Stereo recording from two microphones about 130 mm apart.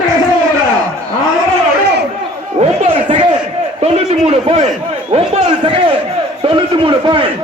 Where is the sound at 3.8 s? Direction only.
55° right (ahead or behind).